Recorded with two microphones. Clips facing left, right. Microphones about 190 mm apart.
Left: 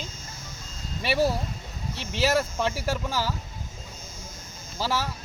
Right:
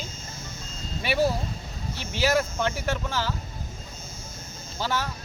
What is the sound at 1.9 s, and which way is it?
Speech, 30° left (ahead or behind).